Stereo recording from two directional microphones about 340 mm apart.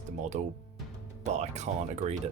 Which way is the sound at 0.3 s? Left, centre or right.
Centre.